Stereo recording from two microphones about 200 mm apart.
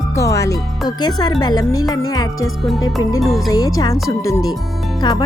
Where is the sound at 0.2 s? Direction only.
15° left (ahead or behind).